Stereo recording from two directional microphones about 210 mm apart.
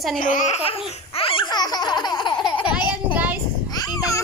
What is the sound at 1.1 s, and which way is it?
Laughter, 25° left (ahead or behind).